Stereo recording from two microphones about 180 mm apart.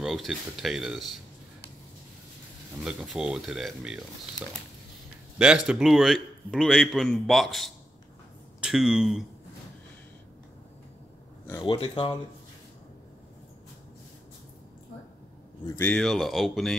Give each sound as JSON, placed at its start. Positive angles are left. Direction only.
{"t": 0.0, "sound": "a man's voice", "side_deg": 0}
{"t": 2.8, "sound": "a man's voice", "side_deg": -5}
{"t": 5.4, "sound": "a man's voice", "side_deg": -5}
{"t": 11.6, "sound": "speech", "side_deg": 30}
{"t": 15.6, "sound": "a man's voice", "side_deg": 10}